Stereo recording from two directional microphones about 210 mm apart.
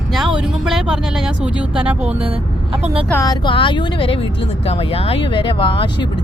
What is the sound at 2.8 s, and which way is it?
Speech, 25° right (ahead or behind).